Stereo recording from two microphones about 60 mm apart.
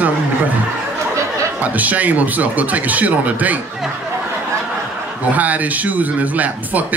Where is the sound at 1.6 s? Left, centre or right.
Right.